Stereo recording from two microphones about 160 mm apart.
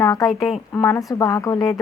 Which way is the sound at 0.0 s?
20° left (ahead or behind).